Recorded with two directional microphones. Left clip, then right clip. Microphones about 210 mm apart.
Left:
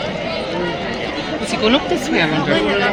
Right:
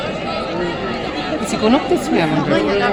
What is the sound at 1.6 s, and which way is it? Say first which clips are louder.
Speech: right 1 dB; 25° right (ahead or behind).